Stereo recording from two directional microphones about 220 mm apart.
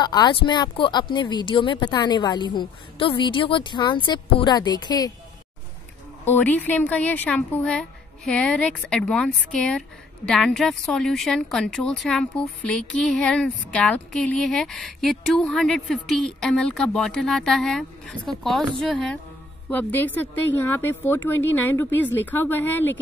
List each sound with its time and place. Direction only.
0.0 s a woman's voice: 20° left (ahead or behind)
6.2 s a woman's voice: 10° left (ahead or behind)